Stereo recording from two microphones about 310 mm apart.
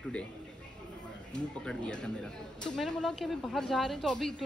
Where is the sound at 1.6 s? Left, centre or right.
Centre.